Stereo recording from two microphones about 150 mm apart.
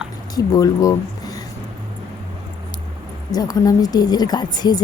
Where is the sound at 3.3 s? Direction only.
25° left (ahead or behind).